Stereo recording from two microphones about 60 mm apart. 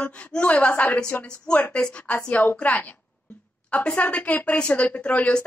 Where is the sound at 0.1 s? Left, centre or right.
Centre.